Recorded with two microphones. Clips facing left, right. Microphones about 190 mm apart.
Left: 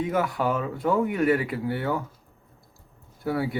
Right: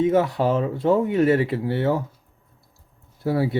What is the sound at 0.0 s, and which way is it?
Speech, 25° right (ahead or behind).